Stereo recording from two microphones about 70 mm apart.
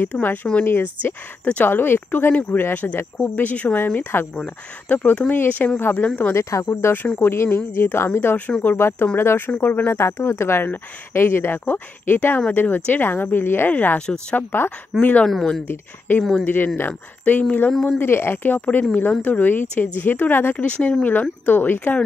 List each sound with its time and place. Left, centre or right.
0.1 s speech: left
8.5 s speech: centre
8.7 s speech: left
9.9 s speech: left; by 16.4 s centre
16.4 s speech: left
17.9 s speech: left
20.5 s speech: centre